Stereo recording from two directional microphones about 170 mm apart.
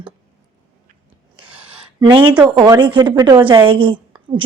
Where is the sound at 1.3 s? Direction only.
30° right (ahead or behind).